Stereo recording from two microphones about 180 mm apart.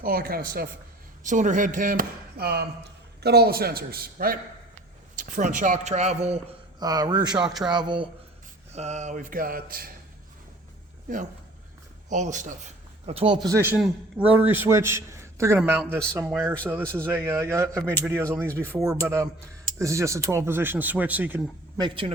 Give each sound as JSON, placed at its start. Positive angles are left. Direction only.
{"t": 0.0, "sound": "speech", "side_deg": -55}
{"t": 1.2, "sound": "speech", "side_deg": -45}
{"t": 6.7, "sound": "speech", "side_deg": -20}
{"t": 8.7, "sound": "speech", "side_deg": -40}
{"t": 12.1, "sound": "a man's voice", "side_deg": -40}
{"t": 21.8, "sound": "speech", "side_deg": -25}